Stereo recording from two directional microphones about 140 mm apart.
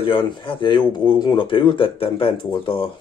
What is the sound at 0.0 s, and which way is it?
Speech, 40° left (ahead or behind).